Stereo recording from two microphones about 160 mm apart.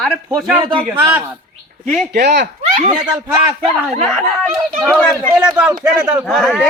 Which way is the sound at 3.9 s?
5° left (ahead or behind).